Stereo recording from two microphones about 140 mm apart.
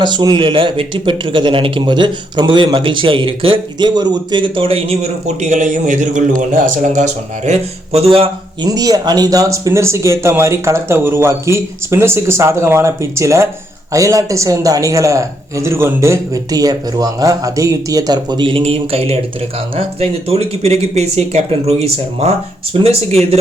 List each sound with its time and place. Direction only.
0.0 s speech: 35° right (ahead or behind)
5.4 s a man's voice: 60° right (ahead or behind); by 8.3 s 45° right (ahead or behind)
8.6 s speech: 25° right (ahead or behind); by 23.4 s 50° right (ahead or behind)